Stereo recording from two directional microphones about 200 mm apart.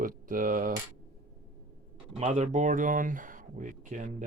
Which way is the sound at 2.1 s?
35° right (ahead or behind).